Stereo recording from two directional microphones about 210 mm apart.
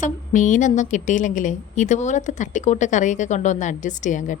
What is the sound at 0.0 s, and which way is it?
A woman's voice, 35° left (ahead or behind).